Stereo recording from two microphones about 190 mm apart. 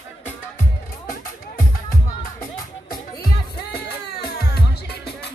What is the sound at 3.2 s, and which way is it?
Music, 55° left (ahead or behind).